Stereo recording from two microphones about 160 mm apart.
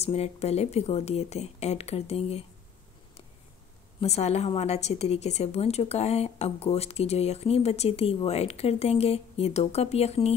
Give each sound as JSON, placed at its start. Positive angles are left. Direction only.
{"t": 0.0, "sound": "a woman's voice", "side_deg": 40}
{"t": 4.0, "sound": "a woman's voice", "side_deg": 40}